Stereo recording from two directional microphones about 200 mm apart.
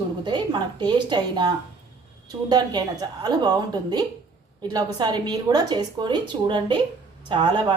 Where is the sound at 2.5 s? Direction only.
20° right (ahead or behind).